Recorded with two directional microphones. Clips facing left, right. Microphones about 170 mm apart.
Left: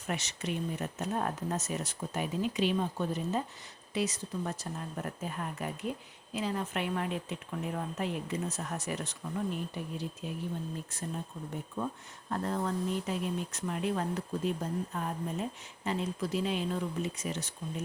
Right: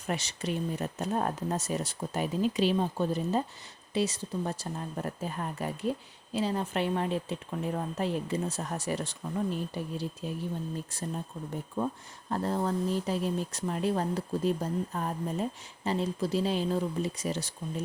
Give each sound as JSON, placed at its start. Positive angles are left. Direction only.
{"t": 0.1, "sound": "speech", "side_deg": -35}
{"t": 12.3, "sound": "speech", "side_deg": -30}